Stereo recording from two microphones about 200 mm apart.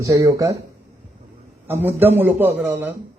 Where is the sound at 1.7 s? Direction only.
10° right (ahead or behind).